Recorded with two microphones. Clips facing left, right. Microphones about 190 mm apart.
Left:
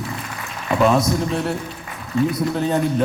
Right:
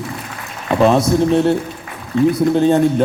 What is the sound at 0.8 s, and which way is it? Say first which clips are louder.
A man's voice: right 5 dB; 25° right (ahead or behind).